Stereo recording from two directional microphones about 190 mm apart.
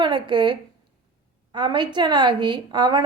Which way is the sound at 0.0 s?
25° right (ahead or behind).